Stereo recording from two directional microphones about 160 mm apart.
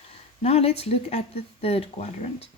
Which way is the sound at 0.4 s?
40° left (ahead or behind).